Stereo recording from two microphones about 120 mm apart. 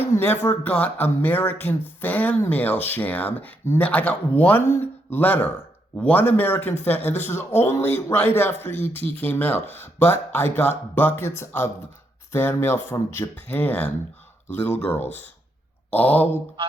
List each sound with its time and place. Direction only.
0.1 s a sound: 15° left (ahead or behind)
0.6 s speech: 15° left (ahead or behind)
9.0 s speech: 55° right (ahead or behind)
9.2 s speech: 15° left (ahead or behind)
16.6 s speech: 50° right (ahead or behind)